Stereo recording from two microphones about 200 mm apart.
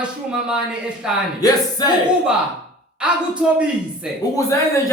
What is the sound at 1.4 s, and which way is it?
Speech, 20° left (ahead or behind).